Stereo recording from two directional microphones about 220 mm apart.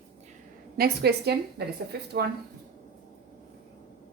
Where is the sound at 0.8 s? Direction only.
45° right (ahead or behind).